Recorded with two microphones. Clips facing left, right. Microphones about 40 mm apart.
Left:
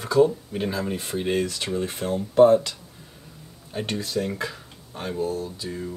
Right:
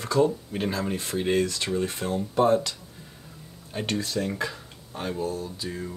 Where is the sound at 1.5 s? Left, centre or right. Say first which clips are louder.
Even; left.